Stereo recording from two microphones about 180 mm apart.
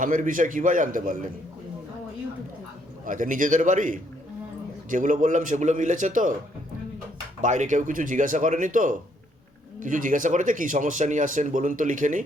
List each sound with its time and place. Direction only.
0.0 s speech: 45° right (ahead or behind)
3.1 s speech: 45° right (ahead or behind)
7.4 s speech: 40° right (ahead or behind)